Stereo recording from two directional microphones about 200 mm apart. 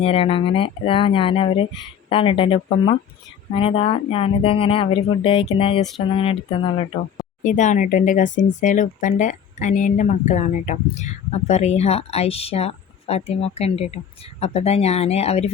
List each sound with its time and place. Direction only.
0.0 s speech: 30° left (ahead or behind)
7.4 s speech: 40° left (ahead or behind)